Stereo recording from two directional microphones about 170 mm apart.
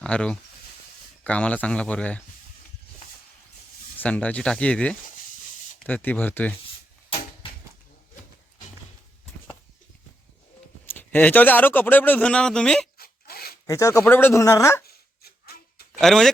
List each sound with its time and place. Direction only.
0.0 s a man's voice: 5° left (ahead or behind)
3.9 s a man's voice: 10° left (ahead or behind)
10.8 s a man's voice: 10° left (ahead or behind)
13.0 s zipper: 65° left (ahead or behind)
13.7 s a man's voice: 20° left (ahead or behind)
14.8 s a sound: 65° left (ahead or behind)
15.9 s speech: 5° left (ahead or behind)